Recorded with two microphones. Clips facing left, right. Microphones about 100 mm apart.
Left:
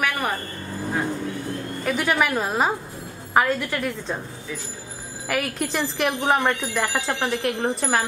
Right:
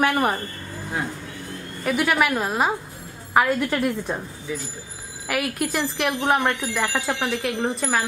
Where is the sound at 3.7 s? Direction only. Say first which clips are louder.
Right 3 dB; 20° right (ahead or behind).